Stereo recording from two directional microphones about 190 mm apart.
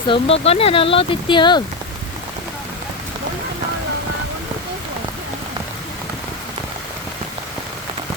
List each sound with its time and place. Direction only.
0.1 s speech: 30° left (ahead or behind)